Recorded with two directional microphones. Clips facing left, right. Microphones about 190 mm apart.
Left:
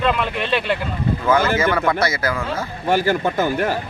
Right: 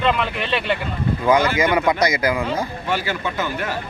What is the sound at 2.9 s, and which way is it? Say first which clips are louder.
Speech: left 8 dB; 45° left (ahead or behind).